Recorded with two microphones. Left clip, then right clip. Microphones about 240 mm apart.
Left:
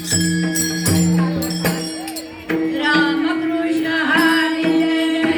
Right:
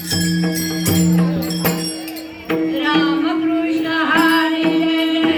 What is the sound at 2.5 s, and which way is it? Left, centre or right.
Music, left.